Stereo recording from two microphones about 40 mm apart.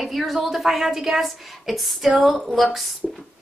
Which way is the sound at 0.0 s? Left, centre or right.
Centre.